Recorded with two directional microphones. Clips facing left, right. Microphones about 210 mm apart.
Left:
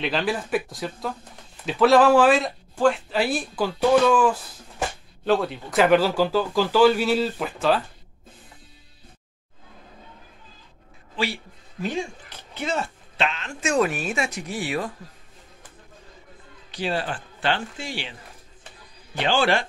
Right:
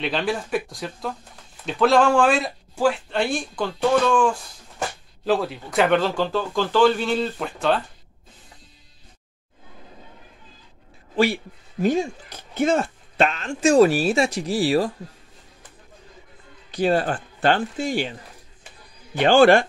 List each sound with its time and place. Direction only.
0.0 s speech: centre (ahead or behind)
11.8 s speech: 45° right (ahead or behind)
13.5 s speech: 35° right (ahead or behind)
16.7 s speech: 45° right (ahead or behind)
19.1 s speech: 50° right (ahead or behind)